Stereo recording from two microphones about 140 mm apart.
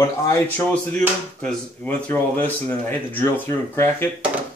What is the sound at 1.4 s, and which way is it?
Speech, 10° left (ahead or behind).